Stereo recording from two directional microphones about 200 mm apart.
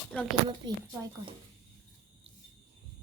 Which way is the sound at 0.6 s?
20° right (ahead or behind).